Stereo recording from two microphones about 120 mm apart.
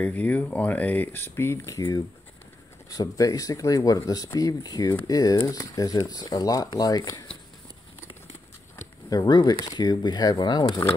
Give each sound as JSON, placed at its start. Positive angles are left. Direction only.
{"t": 0.0, "sound": "speech", "side_deg": 10}
{"t": 9.1, "sound": "speech", "side_deg": 35}